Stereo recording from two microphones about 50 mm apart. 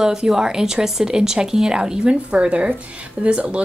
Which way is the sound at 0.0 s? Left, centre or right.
Centre.